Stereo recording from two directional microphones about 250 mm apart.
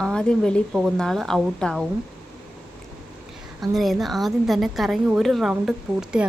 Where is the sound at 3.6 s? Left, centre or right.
Centre.